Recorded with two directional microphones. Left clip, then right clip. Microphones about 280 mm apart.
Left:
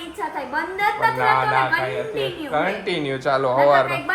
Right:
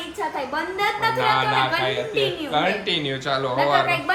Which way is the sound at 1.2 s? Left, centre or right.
Centre.